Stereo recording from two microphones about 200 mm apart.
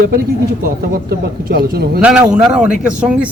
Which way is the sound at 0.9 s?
50° right (ahead or behind).